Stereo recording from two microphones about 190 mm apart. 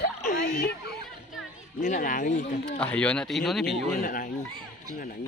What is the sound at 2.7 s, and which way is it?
Speech, 5° left (ahead or behind).